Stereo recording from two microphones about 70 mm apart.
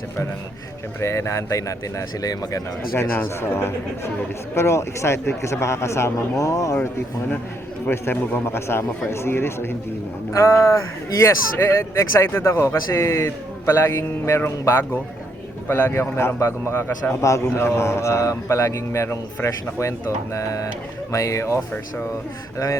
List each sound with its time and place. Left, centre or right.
1.0 s a man's voice: left
2.9 s a man's voice: left
7.9 s a man's voice: left